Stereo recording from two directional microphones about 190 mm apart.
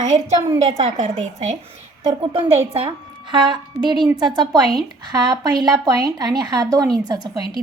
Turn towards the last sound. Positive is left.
turn(degrees=-20)  # may be behind; listen again after turning